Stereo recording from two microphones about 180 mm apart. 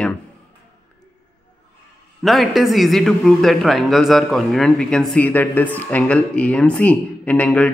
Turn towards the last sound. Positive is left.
turn(degrees=10)  # may be behind; listen again after turning